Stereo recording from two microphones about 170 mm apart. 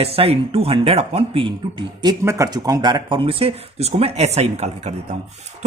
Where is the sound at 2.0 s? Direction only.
20° right (ahead or behind).